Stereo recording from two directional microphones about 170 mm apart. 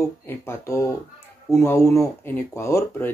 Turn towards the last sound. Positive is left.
turn(degrees=15)  # may be behind; listen again after turning